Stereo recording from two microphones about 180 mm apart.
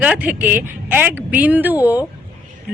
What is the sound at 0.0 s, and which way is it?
A woman's voice, 10° right (ahead or behind).